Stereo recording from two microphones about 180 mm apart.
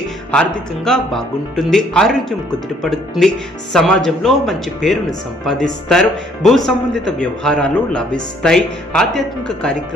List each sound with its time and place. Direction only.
0.3 s a man's voice: 5° left (ahead or behind)